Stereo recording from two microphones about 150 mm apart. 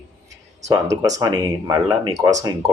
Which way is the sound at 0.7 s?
25° right (ahead or behind).